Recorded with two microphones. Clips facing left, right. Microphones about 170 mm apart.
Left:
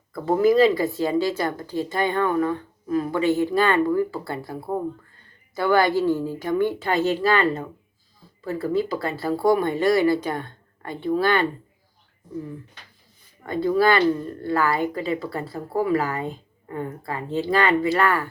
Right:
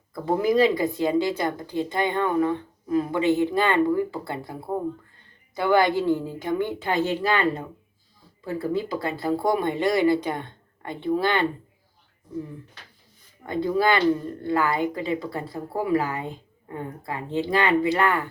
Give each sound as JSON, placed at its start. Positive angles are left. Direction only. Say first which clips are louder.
{"t": 0.1, "sound": "speech", "louder": "left 4 dB", "side_deg": -15}
{"t": 13.4, "sound": "speech", "louder": "left 3 dB", "side_deg": -20}